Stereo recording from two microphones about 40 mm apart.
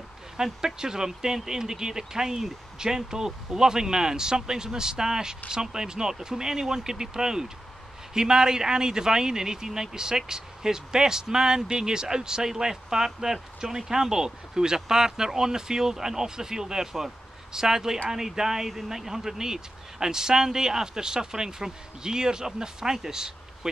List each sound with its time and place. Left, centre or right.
0.4 s speech: centre